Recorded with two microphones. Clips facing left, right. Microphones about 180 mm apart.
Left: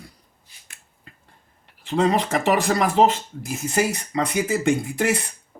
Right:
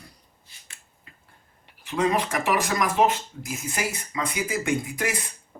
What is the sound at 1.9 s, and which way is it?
Speech, 65° left (ahead or behind).